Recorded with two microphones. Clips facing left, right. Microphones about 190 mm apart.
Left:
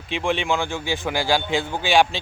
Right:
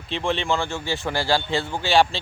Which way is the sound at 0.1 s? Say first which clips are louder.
Left 1 dB; 15° left (ahead or behind).